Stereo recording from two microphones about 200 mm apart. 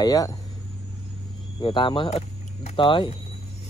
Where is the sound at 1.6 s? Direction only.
25° left (ahead or behind).